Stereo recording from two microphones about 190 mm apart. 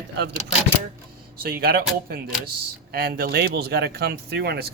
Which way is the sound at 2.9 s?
55° right (ahead or behind).